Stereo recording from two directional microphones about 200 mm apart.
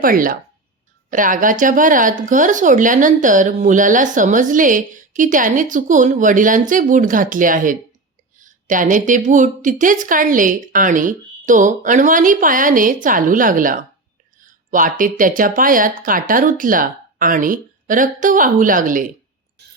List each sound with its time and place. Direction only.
0.0 s speech: 45° right (ahead or behind)
14.4 s a sound: 40° right (ahead or behind)
15.2 s speech: 45° right (ahead or behind)